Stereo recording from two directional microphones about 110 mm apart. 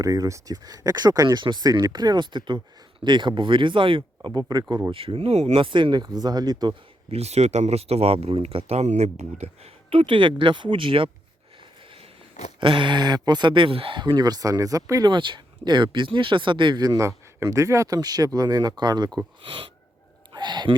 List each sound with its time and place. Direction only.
0.0 s speech: 30° right (ahead or behind); by 4.3 s 50° right (ahead or behind)
4.3 s speech: 40° right (ahead or behind)
4.9 s speech: 55° right (ahead or behind); by 5.6 s 75° right (ahead or behind)
5.6 s speech: 45° right (ahead or behind)
7.1 s speech: 75° right (ahead or behind); by 11.1 s 55° right (ahead or behind)
12.5 s speech: 50° right (ahead or behind); by 15.1 s 30° right (ahead or behind)
15.1 s speech: 45° right (ahead or behind)
17.0 s speech: 25° right (ahead or behind); by 20.7 s 45° right (ahead or behind)